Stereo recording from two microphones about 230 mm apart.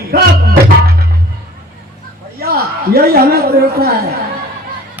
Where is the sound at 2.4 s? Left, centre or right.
Right.